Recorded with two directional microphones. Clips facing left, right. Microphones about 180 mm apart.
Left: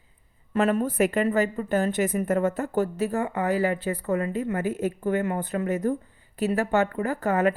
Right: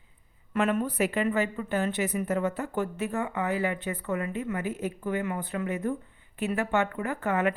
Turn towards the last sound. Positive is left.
turn(degrees=40)  # may be behind; listen again after turning